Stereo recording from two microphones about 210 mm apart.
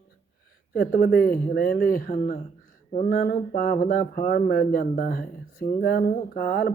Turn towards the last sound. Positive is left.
turn(degrees=45)  # may be behind; listen again after turning